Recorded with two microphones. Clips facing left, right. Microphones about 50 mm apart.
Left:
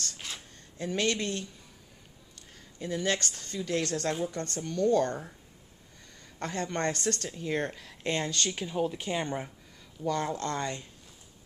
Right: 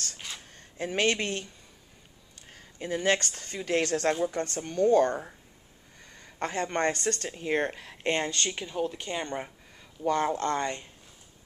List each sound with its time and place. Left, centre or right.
0.2 s a sound: centre
0.6 s speech: right
2.5 s speech: right
4.7 s speech: right
6.1 s a sound: right
6.6 s speech: right
7.2 s speech: right
8.6 s speech: centre
10.0 s speech: right